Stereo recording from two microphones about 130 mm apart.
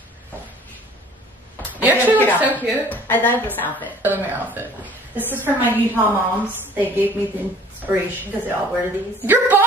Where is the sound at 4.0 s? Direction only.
15° right (ahead or behind).